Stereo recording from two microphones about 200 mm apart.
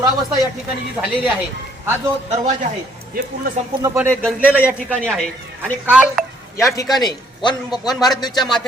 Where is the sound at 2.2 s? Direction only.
35° right (ahead or behind).